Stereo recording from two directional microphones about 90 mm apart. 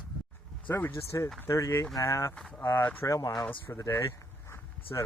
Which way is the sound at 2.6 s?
25° left (ahead or behind).